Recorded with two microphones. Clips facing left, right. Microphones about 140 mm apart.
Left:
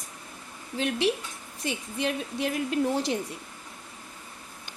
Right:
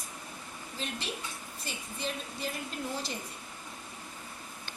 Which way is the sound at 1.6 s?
80° left.